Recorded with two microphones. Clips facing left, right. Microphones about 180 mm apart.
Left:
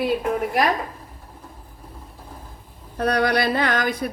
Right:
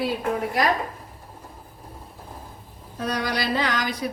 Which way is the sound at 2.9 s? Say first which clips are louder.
Left 6 dB; 60° left (ahead or behind).